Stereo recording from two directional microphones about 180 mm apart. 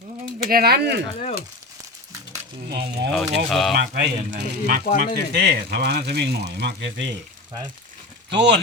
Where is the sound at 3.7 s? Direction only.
75° right (ahead or behind).